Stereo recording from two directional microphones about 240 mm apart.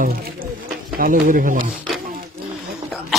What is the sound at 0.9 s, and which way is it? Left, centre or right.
Speech, right.